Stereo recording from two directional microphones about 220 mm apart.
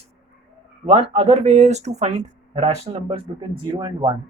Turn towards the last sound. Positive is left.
turn(degrees=-20)  # may be behind; listen again after turning